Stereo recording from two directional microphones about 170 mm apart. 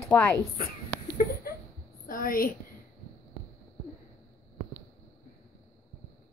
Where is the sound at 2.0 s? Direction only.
55° left (ahead or behind).